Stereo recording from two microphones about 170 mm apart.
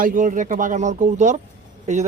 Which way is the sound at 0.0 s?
50° right (ahead or behind).